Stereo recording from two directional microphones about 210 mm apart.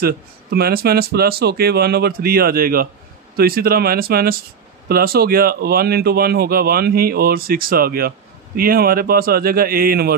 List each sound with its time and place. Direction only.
0.0 s speech: 45° right (ahead or behind)